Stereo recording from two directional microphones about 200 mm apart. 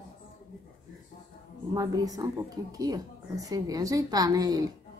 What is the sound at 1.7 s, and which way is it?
A woman's voice, 20° right (ahead or behind).